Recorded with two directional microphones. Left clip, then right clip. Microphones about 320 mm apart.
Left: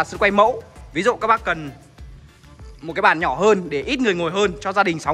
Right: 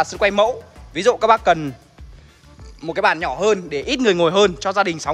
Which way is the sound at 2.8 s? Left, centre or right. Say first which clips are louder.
Left 1 dB; centre.